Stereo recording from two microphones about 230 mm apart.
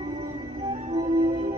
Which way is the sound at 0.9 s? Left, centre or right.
Right.